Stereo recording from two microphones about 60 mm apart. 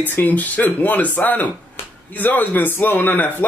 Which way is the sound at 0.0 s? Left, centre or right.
Left.